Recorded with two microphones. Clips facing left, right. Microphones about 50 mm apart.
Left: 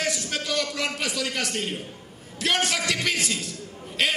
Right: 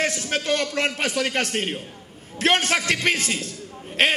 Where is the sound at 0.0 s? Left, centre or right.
Right.